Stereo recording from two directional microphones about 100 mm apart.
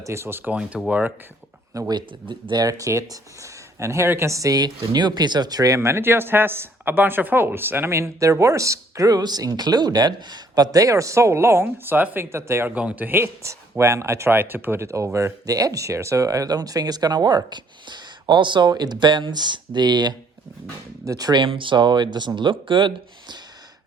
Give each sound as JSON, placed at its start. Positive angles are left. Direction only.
{"t": 0.0, "sound": "speech", "side_deg": -25}
{"t": 0.5, "sound": "speech", "side_deg": -10}
{"t": 1.9, "sound": "speech", "side_deg": -50}
{"t": 2.6, "sound": "speech", "side_deg": -35}
{"t": 12.7, "sound": "speech", "side_deg": -15}
{"t": 21.4, "sound": "speech", "side_deg": -60}